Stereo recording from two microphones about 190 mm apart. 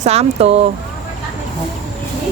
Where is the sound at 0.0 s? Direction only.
35° right (ahead or behind).